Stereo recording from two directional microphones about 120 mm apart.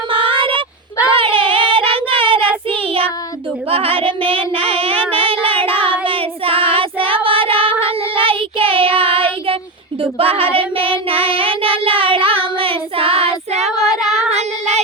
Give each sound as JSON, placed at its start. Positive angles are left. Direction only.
{"t": 0.1, "sound": "fowl", "side_deg": -45}
{"t": 1.2, "sound": "child singing", "side_deg": -45}
{"t": 14.3, "sound": "child singing", "side_deg": -65}